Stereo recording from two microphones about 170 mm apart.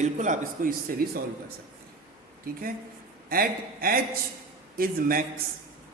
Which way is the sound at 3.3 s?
60° right (ahead or behind).